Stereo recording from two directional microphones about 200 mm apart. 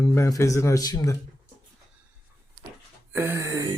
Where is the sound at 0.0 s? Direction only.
15° left (ahead or behind).